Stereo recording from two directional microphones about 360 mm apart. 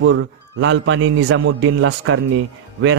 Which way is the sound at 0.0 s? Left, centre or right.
Right.